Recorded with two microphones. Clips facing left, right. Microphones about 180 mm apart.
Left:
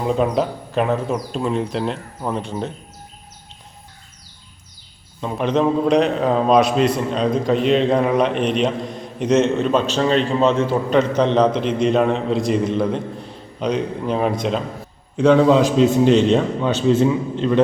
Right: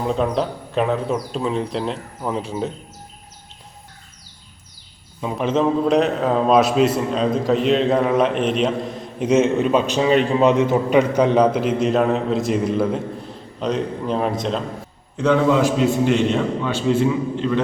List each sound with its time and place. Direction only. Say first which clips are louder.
0.0 s a man's voice: left 2 dB; 5° left (ahead or behind)
5.2 s a man's voice: left 1 dB; 5° right (ahead or behind)
15.1 s a man's voice: left 4 dB; 20° left (ahead or behind)